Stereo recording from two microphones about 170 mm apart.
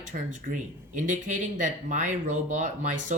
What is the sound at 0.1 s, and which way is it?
Speech, 50° right (ahead or behind).